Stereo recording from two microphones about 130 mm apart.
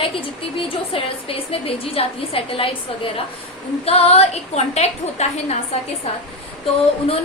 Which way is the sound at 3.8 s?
55° left (ahead or behind).